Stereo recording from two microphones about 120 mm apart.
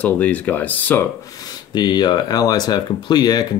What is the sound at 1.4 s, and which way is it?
Speech, 35° left (ahead or behind).